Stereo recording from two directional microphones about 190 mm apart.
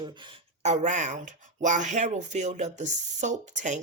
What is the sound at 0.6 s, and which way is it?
Speech, 40° right (ahead or behind).